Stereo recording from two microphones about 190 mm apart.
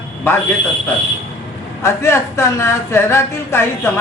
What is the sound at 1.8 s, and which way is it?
A man's voice, 15° left (ahead or behind).